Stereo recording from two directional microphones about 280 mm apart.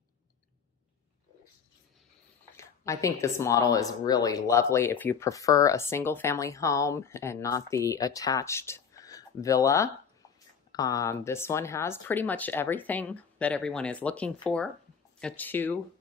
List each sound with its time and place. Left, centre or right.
2.5 s speech: centre